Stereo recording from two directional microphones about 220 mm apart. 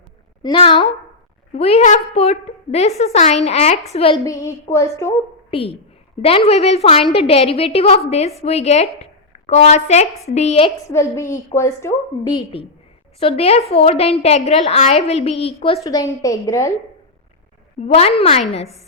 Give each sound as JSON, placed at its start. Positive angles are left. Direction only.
{"t": 0.4, "sound": "a woman's voice", "side_deg": 25}
{"t": 4.3, "sound": "a woman's voice", "side_deg": 15}
{"t": 5.5, "sound": "a woman's voice", "side_deg": 25}
{"t": 10.8, "sound": "a woman's voice", "side_deg": 15}
{"t": 15.8, "sound": "a woman's voice", "side_deg": 15}
{"t": 17.7, "sound": "a woman's voice", "side_deg": 30}